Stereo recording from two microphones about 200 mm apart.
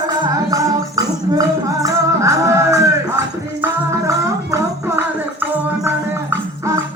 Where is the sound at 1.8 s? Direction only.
15° right (ahead or behind).